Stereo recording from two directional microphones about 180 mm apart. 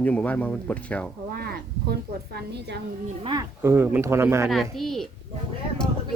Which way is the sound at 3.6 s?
10° right (ahead or behind).